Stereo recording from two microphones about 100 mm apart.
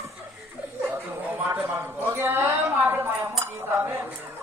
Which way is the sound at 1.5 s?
25° right (ahead or behind).